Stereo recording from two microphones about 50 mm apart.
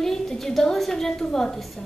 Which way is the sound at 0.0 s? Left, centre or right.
Centre.